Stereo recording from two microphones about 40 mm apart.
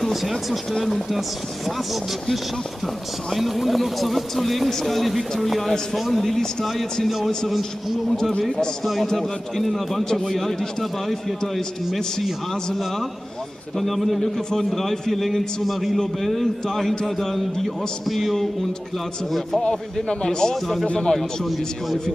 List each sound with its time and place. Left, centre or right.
0.0 s speech: centre
3.3 s a man's voice: centre
8.2 s a man's voice: centre
13.7 s a man's voice: centre
19.6 s a man's voice: left
20.8 s a man's voice: left
21.1 s a man's voice: centre